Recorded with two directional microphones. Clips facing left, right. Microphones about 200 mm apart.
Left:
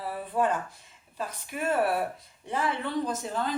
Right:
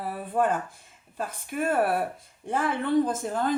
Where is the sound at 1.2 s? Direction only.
50° right (ahead or behind).